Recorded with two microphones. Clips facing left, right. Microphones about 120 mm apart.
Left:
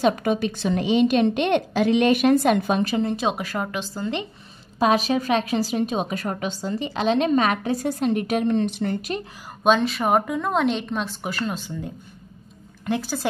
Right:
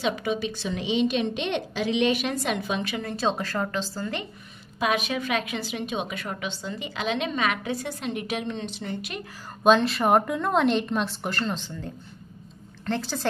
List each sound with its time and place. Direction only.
0.0 s a woman's voice: 50° left (ahead or behind)
3.0 s a woman's voice: 20° left (ahead or behind)
4.7 s a woman's voice: 35° left (ahead or behind); by 9.1 s 50° left (ahead or behind)
9.6 s a woman's voice: centre (ahead or behind)